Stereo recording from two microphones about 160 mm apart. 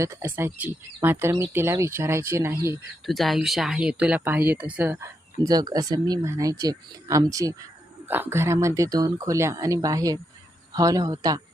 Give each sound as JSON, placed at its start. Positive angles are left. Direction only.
{"t": 0.0, "sound": "speech", "side_deg": -20}
{"t": 3.1, "sound": "speech", "side_deg": 0}